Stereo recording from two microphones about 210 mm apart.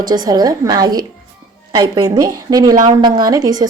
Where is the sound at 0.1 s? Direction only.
20° right (ahead or behind).